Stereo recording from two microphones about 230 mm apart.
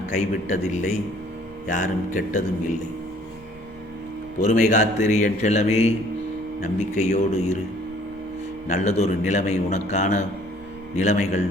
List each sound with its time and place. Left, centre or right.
0.1 s speech: left
4.4 s speech: left
8.6 s a man's voice: left